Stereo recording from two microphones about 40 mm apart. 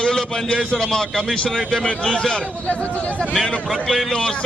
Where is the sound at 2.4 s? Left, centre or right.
Left.